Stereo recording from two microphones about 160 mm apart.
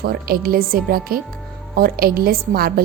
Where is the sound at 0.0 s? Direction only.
75° right (ahead or behind).